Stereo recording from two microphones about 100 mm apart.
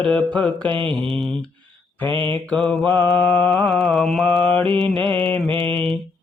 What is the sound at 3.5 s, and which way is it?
Mantra, 5° left (ahead or behind).